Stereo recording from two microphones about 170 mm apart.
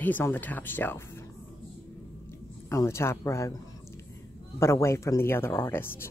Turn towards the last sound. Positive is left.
turn(degrees=15)  # may be behind; listen again after turning